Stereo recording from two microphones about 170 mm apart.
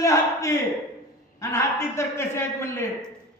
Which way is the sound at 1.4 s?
15° left (ahead or behind).